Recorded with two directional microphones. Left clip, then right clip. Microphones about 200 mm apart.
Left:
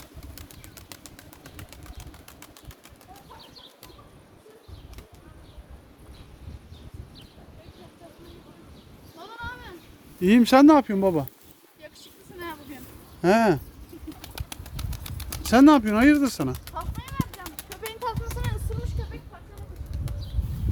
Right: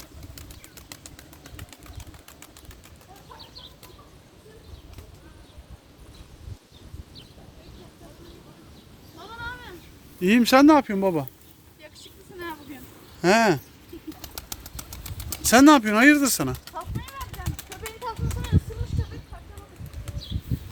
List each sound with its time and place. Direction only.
9.1 s sheep: 60° left (ahead or behind)
10.2 s speech: 20° left (ahead or behind)
13.2 s speech: 10° left (ahead or behind)
14.8 s bird: 15° right (ahead or behind)
15.4 s speech: 5° left (ahead or behind)
17.4 s a sound: 5° left (ahead or behind)
17.8 s a sound: 20° left (ahead or behind)